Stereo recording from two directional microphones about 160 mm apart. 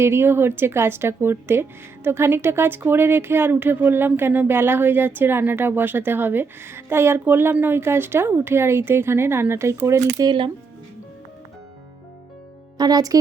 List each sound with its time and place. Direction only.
0.0 s speech: 15° right (ahead or behind)
12.7 s a woman's voice: 25° right (ahead or behind)